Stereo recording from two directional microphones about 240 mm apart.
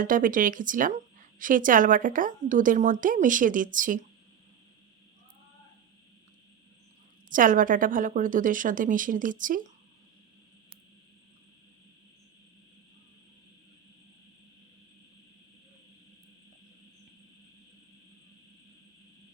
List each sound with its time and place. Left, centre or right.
0.0 s a woman's voice: right
7.3 s a woman's voice: right